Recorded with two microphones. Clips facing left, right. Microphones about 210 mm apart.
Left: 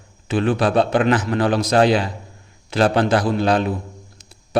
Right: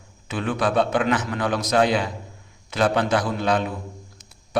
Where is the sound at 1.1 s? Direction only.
35° left (ahead or behind).